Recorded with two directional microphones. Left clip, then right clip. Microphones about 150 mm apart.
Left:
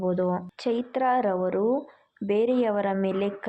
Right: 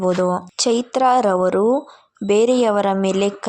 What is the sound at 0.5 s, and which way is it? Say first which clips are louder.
A woman's voice: right 9 dB; 40° right (ahead or behind).